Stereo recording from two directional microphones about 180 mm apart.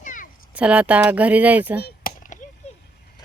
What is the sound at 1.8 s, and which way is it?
Chop, 50° left (ahead or behind).